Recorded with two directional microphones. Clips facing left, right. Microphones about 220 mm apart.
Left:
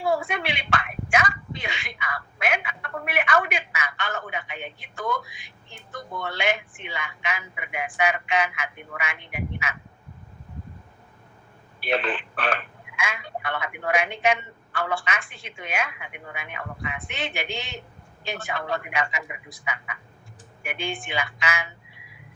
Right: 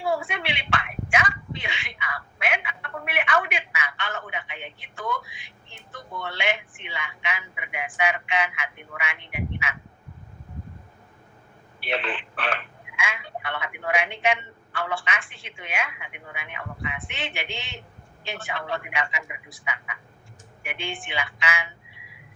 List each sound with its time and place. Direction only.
0.0 s a sound: 40° left (ahead or behind)
11.8 s telephone: 45° left (ahead or behind)
20.6 s a woman's voice: 40° left (ahead or behind)